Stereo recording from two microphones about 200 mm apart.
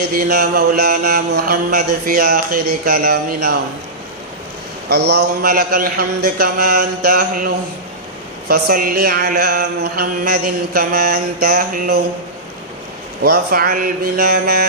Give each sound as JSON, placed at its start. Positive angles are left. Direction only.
{"t": 0.1, "sound": "mantra", "side_deg": -45}
{"t": 4.9, "sound": "mantra", "side_deg": -55}
{"t": 13.2, "sound": "mantra", "side_deg": -50}